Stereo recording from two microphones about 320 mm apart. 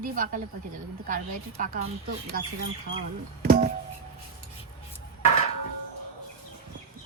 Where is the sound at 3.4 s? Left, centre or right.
Right.